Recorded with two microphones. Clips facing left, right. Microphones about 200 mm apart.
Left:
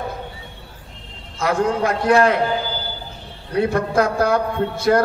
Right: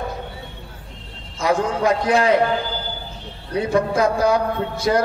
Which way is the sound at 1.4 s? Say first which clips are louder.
Even; 60° left (ahead or behind).